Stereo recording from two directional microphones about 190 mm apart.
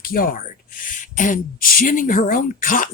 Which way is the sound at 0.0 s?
50° left (ahead or behind).